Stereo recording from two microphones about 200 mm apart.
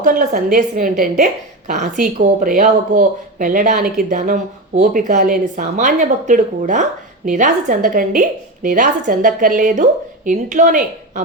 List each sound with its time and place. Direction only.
0.0 s a woman's voice: 40° right (ahead or behind)